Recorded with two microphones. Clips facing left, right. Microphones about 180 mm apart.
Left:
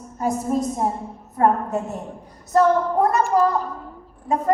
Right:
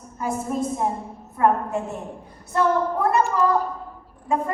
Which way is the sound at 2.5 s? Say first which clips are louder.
Left 4 dB; 40° left (ahead or behind).